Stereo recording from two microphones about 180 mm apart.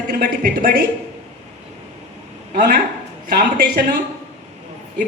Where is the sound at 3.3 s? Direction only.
55° right (ahead or behind).